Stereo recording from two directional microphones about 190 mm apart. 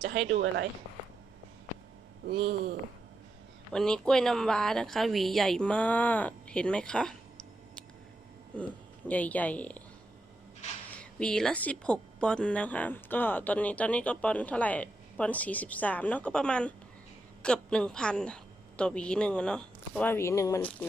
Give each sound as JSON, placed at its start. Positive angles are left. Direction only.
{"t": 0.3, "sound": "speech", "side_deg": -65}
{"t": 2.4, "sound": "speech", "side_deg": -60}
{"t": 3.7, "sound": "a woman's voice", "side_deg": 5}
{"t": 8.5, "sound": "a woman's voice", "side_deg": 5}
{"t": 10.9, "sound": "a woman's voice", "side_deg": 5}